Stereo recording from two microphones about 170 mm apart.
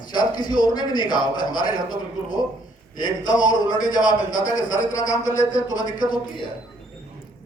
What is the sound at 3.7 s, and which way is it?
Speech, 25° left (ahead or behind).